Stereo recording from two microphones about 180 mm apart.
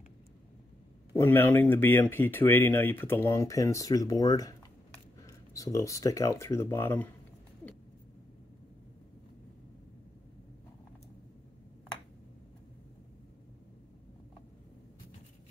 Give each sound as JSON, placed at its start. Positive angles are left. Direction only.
{"t": 1.1, "sound": "speech", "side_deg": 15}